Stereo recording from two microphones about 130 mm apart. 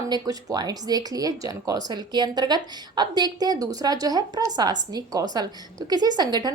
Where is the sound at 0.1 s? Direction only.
30° right (ahead or behind).